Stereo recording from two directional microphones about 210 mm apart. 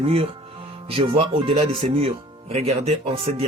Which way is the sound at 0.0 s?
25° right (ahead or behind).